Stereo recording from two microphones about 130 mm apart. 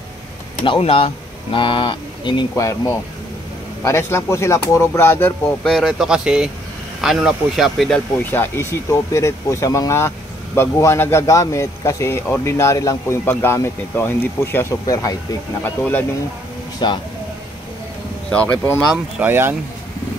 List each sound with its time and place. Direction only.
0.6 s speech: 45° left (ahead or behind)
2.5 s speech: 25° left (ahead or behind)
5.6 s speech: 5° left (ahead or behind)
8.2 s speech: 15° left (ahead or behind)
15.6 s speech: 15° left (ahead or behind)
16.8 s speech: 35° left (ahead or behind)
18.3 s speech: 10° left (ahead or behind)
19.1 s speech: 15° right (ahead or behind)